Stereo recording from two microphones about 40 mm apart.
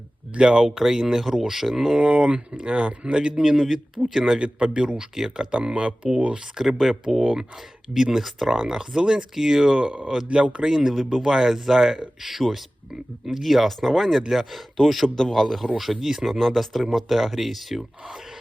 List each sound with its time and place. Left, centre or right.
0.3 s speech: right
0.7 s speech: centre
2.0 s speech: right; by 4.4 s centre
4.4 s speech: right
6.8 s speech: centre
7.2 s speech: right
7.9 s speech: centre
8.5 s speech: centre
9.7 s speech: right
10.6 s speech: centre
13.4 s speech: centre
15.0 s a man's voice: centre
15.8 s speech: centre